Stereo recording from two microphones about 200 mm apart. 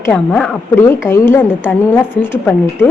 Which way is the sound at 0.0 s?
5° left (ahead or behind).